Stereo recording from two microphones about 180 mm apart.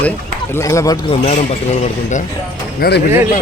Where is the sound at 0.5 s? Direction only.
15° left (ahead or behind).